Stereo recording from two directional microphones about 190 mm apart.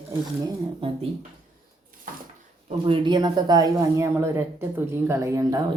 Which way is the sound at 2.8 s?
25° right (ahead or behind).